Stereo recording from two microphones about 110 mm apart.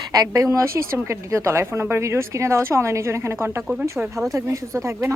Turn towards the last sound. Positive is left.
turn(degrees=-25)  # may be behind; listen again after turning